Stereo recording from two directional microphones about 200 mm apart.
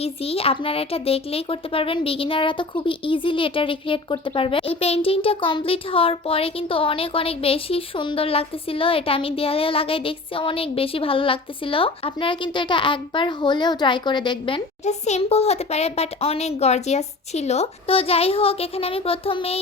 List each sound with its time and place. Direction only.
0.0 s speech: 30° left (ahead or behind)